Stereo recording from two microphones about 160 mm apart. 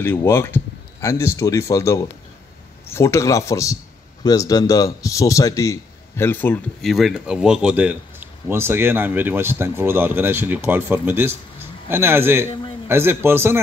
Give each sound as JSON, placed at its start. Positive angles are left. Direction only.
{"t": 0.0, "sound": "a man's voice", "side_deg": 15}
{"t": 6.8, "sound": "a man's voice", "side_deg": 0}